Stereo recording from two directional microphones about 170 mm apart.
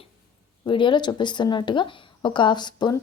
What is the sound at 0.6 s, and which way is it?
A woman's voice, 30° left (ahead or behind).